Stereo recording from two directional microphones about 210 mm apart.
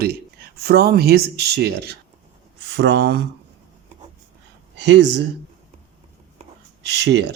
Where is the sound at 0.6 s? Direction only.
50° right (ahead or behind).